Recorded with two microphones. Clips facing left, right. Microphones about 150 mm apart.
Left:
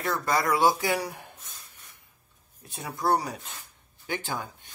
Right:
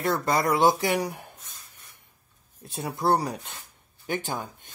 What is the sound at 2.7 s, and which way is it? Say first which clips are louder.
Speech: right 2 dB; 30° right (ahead or behind).